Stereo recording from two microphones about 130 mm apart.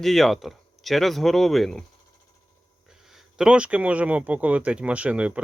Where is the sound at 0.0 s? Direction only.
Centre (ahead or behind).